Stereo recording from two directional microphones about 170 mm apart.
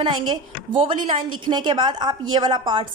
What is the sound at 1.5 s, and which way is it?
A woman's voice, 25° right (ahead or behind).